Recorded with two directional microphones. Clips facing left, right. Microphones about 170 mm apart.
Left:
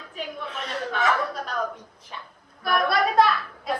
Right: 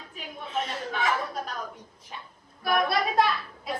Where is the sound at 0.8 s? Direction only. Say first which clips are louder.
Left 7 dB; 45° left (ahead or behind).